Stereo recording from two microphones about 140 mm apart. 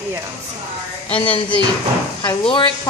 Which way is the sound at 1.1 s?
35° left (ahead or behind).